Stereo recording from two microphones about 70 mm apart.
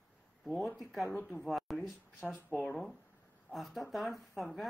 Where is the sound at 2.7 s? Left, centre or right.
Centre.